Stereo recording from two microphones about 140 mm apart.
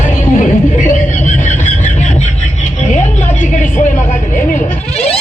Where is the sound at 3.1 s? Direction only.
60° left (ahead or behind).